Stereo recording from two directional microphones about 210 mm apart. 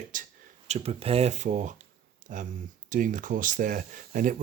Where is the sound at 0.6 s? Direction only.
30° right (ahead or behind).